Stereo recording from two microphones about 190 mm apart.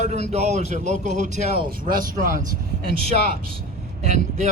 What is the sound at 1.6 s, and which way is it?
Speech, 45° right (ahead or behind).